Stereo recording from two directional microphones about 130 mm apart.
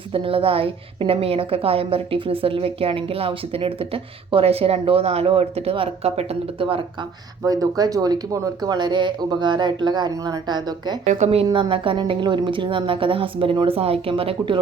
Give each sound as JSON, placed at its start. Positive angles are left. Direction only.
{"t": 0.1, "sound": "a woman's voice", "side_deg": -45}
{"t": 7.4, "sound": "speech", "side_deg": -30}
{"t": 11.0, "sound": "a woman's voice", "side_deg": -65}
{"t": 11.4, "sound": "speech", "side_deg": -40}